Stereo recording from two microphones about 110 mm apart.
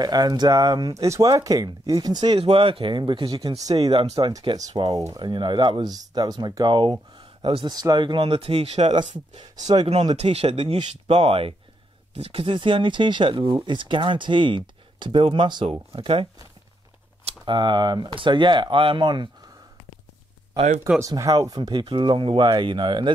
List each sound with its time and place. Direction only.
0.0 s speech: 35° right (ahead or behind)
2.4 s speech: 55° right (ahead or behind); by 3.7 s 35° right (ahead or behind)
3.7 s speech: 50° right (ahead or behind)
4.1 s speech: 35° right (ahead or behind)
4.8 s speech: 45° right (ahead or behind)
7.7 s speech: 40° right (ahead or behind)
8.3 s speech: 65° right (ahead or behind)
9.4 s speech: 40° right (ahead or behind)
10.1 s speech: 70° right (ahead or behind)
11.1 s speech: 65° right (ahead or behind)
12.5 s speech: 45° right (ahead or behind)
17.3 s speech: 45° right (ahead or behind)
20.5 s speech: 90° right
21.0 s speech: 30° right (ahead or behind)